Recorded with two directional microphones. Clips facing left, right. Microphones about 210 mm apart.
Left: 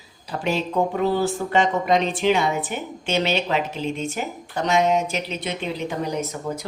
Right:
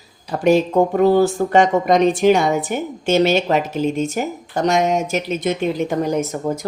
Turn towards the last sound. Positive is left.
turn(degrees=-45)  # may be behind; listen again after turning